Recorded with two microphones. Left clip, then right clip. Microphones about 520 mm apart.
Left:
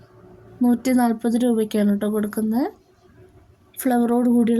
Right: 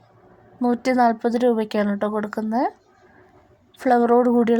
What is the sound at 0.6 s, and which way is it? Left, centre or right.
A woman's voice, left.